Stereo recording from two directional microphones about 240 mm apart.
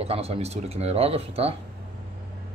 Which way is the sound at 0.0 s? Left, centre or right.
Right.